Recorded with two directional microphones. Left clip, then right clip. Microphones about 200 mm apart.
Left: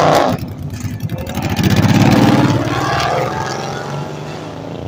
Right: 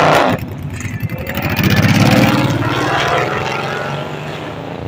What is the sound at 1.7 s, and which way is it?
Vehicle, 5° right (ahead or behind).